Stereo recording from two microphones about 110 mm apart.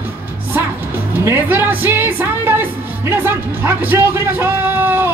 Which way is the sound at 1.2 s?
20° right (ahead or behind).